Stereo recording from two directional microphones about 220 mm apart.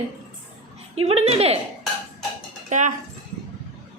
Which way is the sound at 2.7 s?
35° right (ahead or behind).